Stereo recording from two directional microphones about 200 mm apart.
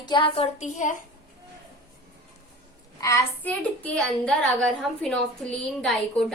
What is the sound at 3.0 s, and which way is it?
A woman's voice, 15° left (ahead or behind).